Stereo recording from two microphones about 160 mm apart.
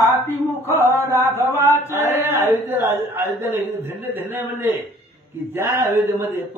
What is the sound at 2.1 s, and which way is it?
Speech, 15° right (ahead or behind).